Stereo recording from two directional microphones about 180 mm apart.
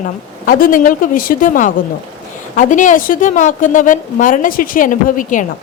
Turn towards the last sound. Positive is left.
turn(degrees=45)  # may be behind; listen again after turning